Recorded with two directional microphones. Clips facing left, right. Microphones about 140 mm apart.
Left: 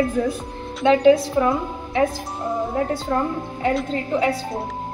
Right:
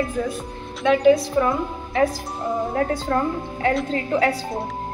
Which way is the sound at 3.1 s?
15° left (ahead or behind).